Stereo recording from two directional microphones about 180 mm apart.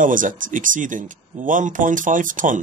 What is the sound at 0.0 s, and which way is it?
Speech, 45° right (ahead or behind).